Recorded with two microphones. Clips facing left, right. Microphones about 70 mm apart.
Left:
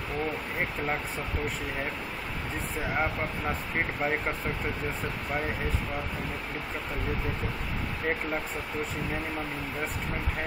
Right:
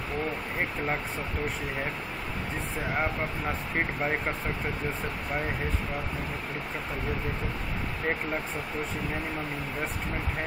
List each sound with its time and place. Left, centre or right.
3.0 s speech: centre